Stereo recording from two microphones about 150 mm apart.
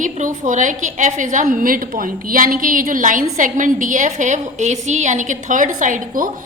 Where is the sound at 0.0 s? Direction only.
55° right (ahead or behind).